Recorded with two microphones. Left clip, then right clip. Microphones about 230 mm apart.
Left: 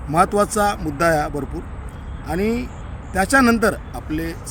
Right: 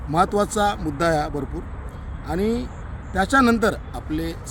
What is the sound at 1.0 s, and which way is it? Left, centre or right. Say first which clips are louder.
Speech: left 4 dB; centre.